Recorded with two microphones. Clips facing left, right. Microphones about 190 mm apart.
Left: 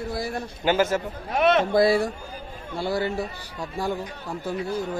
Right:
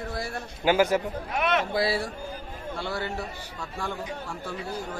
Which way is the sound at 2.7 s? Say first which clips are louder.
Left 7 dB; 40° left (ahead or behind).